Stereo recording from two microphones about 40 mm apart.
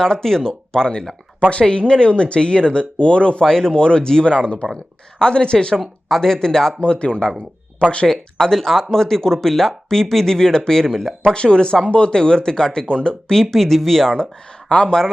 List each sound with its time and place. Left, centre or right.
0.0 s speech: centre
3.4 s speech: centre
6.7 s speech: left
8.0 s speech: centre
11.3 s speech: left
13.3 s speech: centre
14.7 s speech: left